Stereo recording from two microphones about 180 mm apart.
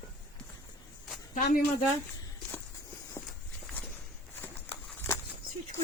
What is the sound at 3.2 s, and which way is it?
Walk, 10° left (ahead or behind).